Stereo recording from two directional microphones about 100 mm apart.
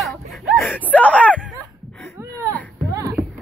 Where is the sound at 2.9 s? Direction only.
35° right (ahead or behind).